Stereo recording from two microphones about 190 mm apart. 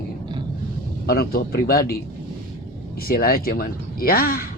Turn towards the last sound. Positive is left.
turn(degrees=50)  # may be behind; listen again after turning